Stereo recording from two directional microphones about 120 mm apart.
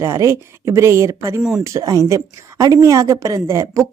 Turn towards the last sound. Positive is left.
turn(degrees=-25)  # may be behind; listen again after turning